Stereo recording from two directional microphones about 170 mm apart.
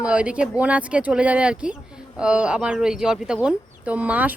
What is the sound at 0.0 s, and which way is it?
Speech, 5° right (ahead or behind).